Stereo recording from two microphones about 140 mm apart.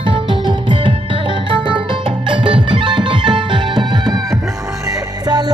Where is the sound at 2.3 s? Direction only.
35° right (ahead or behind).